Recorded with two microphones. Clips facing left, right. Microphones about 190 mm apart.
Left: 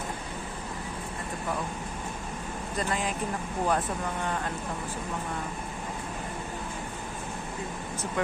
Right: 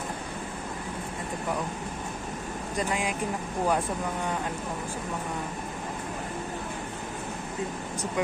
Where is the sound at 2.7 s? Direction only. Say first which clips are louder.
Right 1 dB; 15° right (ahead or behind).